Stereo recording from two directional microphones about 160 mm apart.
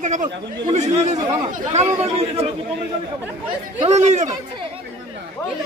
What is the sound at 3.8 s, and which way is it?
Speech, 45° right (ahead or behind).